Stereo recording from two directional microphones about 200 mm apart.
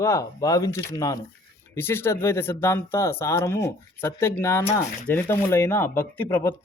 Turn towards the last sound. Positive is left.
turn(degrees=10)  # may be behind; listen again after turning